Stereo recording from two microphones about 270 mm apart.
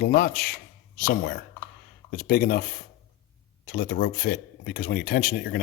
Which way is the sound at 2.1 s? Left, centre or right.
Left.